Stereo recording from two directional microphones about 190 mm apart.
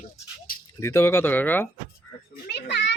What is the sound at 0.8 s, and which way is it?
Speech, 15° left (ahead or behind).